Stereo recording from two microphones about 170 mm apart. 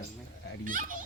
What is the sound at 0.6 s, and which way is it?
Speech, 55° right (ahead or behind).